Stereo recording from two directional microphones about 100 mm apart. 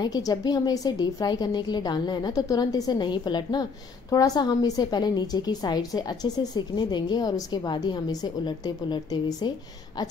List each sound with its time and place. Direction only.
0.0 s a woman's voice: 40° left (ahead or behind)
4.1 s a woman's voice: 40° left (ahead or behind)